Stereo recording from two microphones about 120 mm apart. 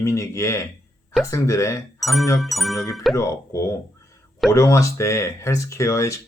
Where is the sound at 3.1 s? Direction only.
25° left (ahead or behind).